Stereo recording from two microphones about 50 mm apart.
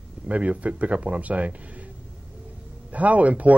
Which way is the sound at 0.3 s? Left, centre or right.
Right.